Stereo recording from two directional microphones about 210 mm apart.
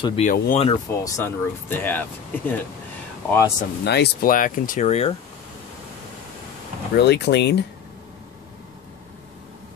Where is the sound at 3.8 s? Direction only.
50° left (ahead or behind); by 5.1 s 30° left (ahead or behind).